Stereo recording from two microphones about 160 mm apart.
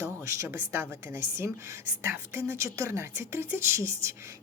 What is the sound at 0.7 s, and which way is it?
Speech, 15° right (ahead or behind).